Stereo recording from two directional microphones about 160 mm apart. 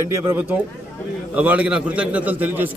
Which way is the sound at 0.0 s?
15° right (ahead or behind).